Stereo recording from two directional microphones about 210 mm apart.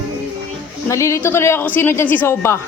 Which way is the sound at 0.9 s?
15° left (ahead or behind).